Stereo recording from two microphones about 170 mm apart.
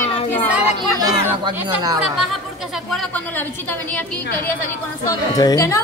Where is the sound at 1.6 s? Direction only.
25° right (ahead or behind).